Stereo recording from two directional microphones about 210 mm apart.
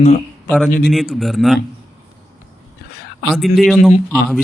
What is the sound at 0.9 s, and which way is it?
Speech, centre (ahead or behind).